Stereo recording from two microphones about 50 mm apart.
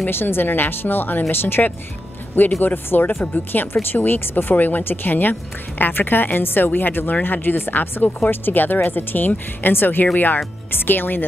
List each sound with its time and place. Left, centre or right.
0.0 s a woman's voice: left